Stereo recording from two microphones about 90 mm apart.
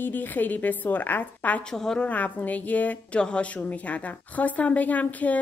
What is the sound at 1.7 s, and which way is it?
A woman's voice, 5° left (ahead or behind).